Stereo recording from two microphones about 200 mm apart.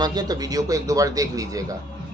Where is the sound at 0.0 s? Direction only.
20° right (ahead or behind).